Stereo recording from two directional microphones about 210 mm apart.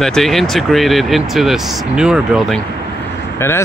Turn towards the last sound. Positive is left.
turn(degrees=10)  # may be behind; listen again after turning